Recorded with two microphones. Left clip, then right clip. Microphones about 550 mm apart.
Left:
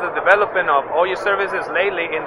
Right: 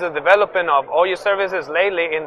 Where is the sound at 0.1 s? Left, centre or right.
Right.